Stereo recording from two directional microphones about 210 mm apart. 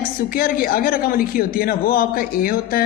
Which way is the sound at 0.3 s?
45° left (ahead or behind).